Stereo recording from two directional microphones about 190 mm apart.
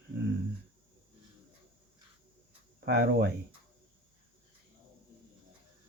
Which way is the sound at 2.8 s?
55° right (ahead or behind).